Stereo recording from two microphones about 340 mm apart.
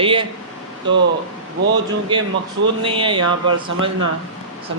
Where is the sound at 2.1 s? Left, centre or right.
Centre.